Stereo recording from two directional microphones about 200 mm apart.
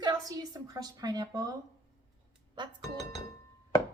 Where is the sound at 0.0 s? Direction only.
20° right (ahead or behind).